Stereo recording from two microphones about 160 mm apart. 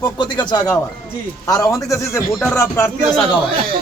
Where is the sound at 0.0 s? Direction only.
25° left (ahead or behind).